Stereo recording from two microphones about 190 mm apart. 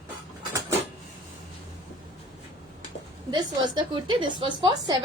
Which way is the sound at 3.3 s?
25° right (ahead or behind).